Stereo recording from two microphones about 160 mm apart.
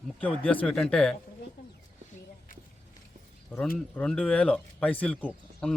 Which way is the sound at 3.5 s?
10° left (ahead or behind).